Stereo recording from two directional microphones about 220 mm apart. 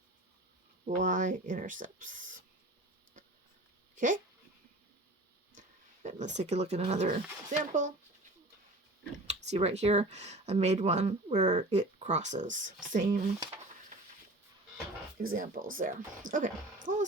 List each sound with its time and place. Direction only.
0.9 s speech: 35° right (ahead or behind)
3.9 s speech: 35° right (ahead or behind)
5.5 s speech: 35° right (ahead or behind)
9.5 s speech: 30° right (ahead or behind)
15.2 s speech: 40° right (ahead or behind)